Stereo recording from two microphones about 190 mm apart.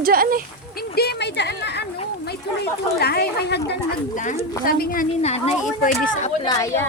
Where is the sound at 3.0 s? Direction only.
55° left (ahead or behind).